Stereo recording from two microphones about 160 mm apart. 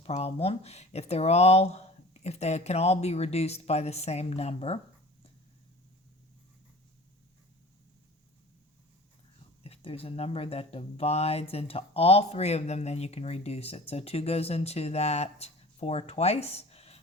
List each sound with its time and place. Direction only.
0.0 s speech: 40° left (ahead or behind)
9.6 s speech: 40° left (ahead or behind)